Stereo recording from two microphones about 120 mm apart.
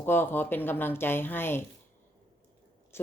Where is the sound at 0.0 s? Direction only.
20° left (ahead or behind).